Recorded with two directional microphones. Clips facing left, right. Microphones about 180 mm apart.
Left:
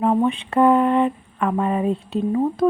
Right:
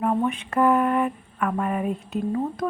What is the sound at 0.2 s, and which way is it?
A woman's voice, 30° left (ahead or behind).